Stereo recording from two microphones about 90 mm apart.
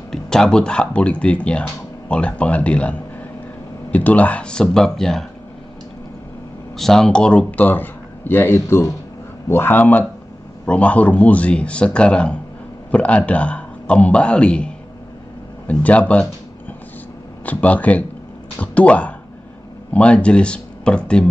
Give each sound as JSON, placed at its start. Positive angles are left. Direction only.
{"t": 0.1, "sound": "a man's voice", "side_deg": 5}
{"t": 6.8, "sound": "a man's voice", "side_deg": 5}
{"t": 17.5, "sound": "a man's voice", "side_deg": 15}